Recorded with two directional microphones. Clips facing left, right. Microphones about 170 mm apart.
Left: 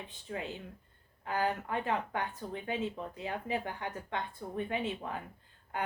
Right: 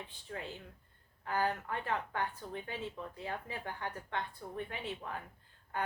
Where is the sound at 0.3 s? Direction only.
20° left (ahead or behind).